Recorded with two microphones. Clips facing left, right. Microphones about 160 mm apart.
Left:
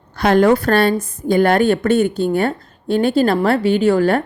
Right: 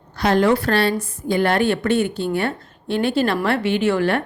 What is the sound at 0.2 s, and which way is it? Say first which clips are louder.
A woman's voice: left 4 dB; 50° left (ahead or behind).